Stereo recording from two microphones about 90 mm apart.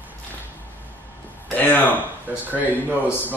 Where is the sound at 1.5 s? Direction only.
20° left (ahead or behind).